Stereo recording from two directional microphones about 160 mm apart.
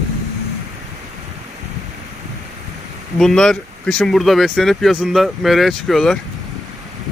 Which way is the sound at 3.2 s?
5° left (ahead or behind).